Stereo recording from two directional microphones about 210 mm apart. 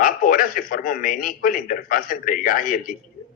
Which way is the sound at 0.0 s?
40° left (ahead or behind).